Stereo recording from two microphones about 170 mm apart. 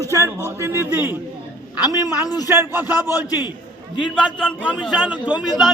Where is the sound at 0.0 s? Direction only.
15° right (ahead or behind).